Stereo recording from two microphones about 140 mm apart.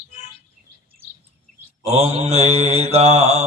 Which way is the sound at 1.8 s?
50° right (ahead or behind).